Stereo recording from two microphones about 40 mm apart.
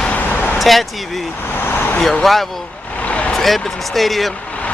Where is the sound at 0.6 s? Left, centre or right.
Centre.